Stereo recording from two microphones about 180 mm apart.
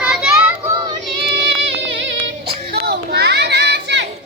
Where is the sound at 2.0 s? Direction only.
90° right.